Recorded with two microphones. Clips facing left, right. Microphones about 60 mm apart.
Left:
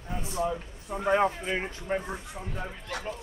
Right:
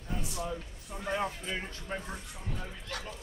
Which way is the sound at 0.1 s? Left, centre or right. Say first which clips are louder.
Left 6 dB; left.